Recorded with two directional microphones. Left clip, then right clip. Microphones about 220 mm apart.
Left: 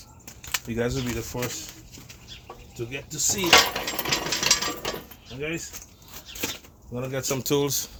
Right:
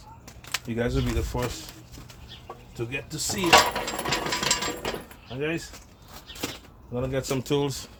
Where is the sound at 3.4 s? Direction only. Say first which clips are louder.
Even; 10° right (ahead or behind).